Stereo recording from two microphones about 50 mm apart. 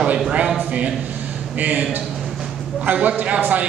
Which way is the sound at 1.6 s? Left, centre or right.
Right.